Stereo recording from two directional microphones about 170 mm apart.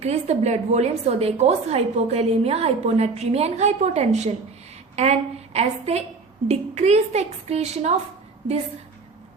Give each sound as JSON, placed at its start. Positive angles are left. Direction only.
{"t": 0.0, "sound": "a woman's voice", "side_deg": -40}